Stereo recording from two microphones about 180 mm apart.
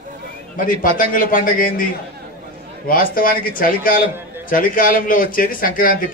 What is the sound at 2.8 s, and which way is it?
A man's voice, 50° left (ahead or behind).